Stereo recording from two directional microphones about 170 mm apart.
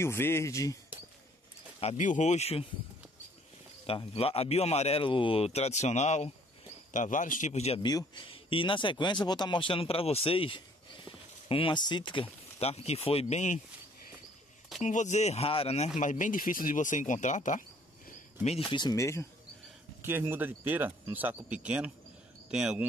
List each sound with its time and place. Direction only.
0.0 s speech: 15° left (ahead or behind)
1.8 s a man's voice: 45° left (ahead or behind)
3.8 s a man's voice: 35° left (ahead or behind)
7.8 s speech: 25° left (ahead or behind); by 13.6 s 45° left (ahead or behind)
14.8 s a man's voice: 45° left (ahead or behind)
16.0 s speech: 50° left (ahead or behind)
18.7 s speech: 25° left (ahead or behind)
20.0 s speech: 15° right (ahead or behind)